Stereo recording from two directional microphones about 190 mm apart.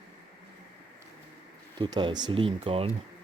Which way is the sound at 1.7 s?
20° right (ahead or behind).